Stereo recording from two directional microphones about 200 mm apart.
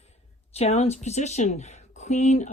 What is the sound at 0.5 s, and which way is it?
Speech, 30° left (ahead or behind).